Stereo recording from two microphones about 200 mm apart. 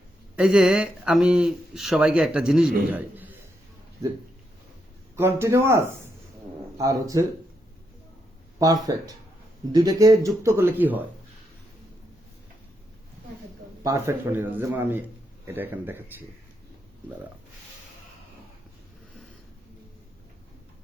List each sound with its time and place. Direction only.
0.3 s speech: 5° right (ahead or behind)
8.5 s speech: 15° right (ahead or behind)
13.8 s speech: 15° right (ahead or behind)